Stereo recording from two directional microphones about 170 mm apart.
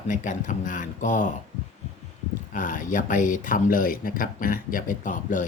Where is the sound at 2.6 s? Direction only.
50° left (ahead or behind).